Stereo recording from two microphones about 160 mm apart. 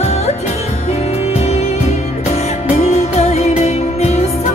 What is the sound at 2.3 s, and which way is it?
Music, 45° left (ahead or behind).